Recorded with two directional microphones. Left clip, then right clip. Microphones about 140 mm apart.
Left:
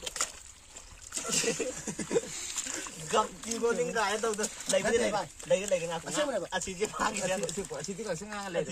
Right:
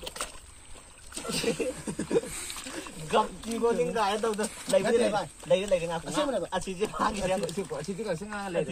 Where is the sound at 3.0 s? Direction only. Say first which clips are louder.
Right 3 dB; 10° left (ahead or behind).